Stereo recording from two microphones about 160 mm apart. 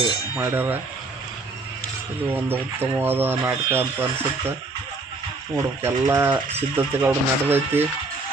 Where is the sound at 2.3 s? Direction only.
15° right (ahead or behind).